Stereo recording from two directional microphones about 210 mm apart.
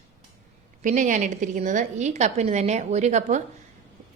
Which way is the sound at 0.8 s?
35° right (ahead or behind).